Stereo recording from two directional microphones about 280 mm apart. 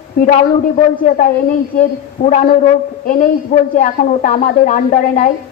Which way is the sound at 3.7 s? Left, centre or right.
Left.